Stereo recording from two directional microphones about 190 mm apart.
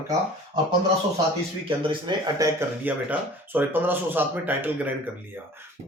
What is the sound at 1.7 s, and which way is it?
Speech, 25° right (ahead or behind).